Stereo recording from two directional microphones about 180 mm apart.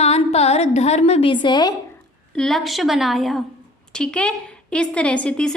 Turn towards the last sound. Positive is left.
turn(degrees=5)  # may be behind; listen again after turning